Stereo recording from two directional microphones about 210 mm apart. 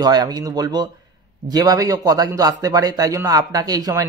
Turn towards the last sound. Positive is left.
turn(degrees=-15)  # may be behind; listen again after turning